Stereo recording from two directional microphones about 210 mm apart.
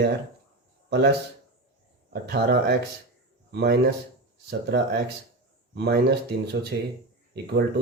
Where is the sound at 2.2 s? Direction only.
50° right (ahead or behind).